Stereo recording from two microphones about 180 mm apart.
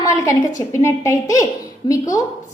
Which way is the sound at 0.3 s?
15° left (ahead or behind).